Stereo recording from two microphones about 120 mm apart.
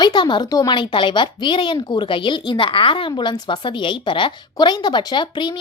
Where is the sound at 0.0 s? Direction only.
40° left (ahead or behind).